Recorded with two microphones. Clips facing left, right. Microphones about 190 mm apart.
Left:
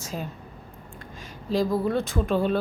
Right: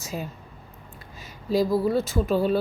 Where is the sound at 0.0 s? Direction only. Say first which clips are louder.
Right 1 dB; 10° right (ahead or behind).